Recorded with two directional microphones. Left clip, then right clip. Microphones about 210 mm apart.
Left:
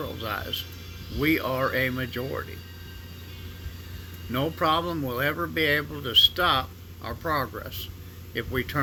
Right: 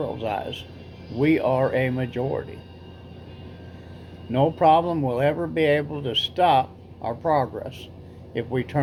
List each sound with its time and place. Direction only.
0.2 s speech: 15° left (ahead or behind)
4.3 s speech: 20° left (ahead or behind)